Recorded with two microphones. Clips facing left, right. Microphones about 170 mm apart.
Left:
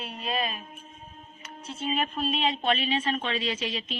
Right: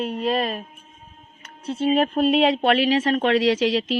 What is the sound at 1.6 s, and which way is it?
Speech, 60° right (ahead or behind).